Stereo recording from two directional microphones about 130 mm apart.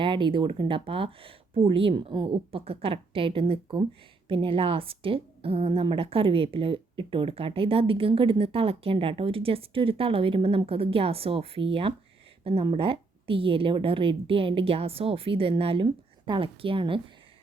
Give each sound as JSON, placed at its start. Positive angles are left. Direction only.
{"t": 0.0, "sound": "a woman's voice", "side_deg": -40}